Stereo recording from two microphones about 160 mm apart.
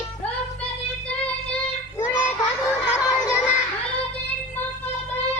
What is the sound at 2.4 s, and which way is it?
Children playing, 25° left (ahead or behind).